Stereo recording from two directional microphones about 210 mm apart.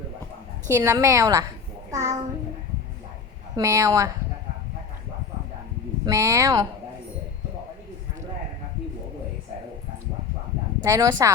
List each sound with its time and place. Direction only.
0.7 s a woman's voice: 15° right (ahead or behind)
3.5 s a woman's voice: 15° right (ahead or behind)
6.1 s a woman's voice: 15° right (ahead or behind)
10.8 s a woman's voice: 15° right (ahead or behind)